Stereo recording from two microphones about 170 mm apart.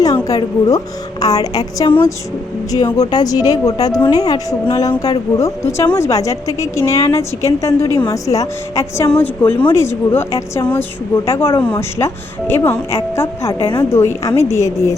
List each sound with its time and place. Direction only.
0.3 s a woman's voice: 20° left (ahead or behind)
2.7 s a woman's voice: 20° left (ahead or behind)